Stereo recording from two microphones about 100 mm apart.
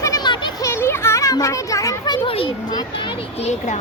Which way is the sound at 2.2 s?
65° left (ahead or behind).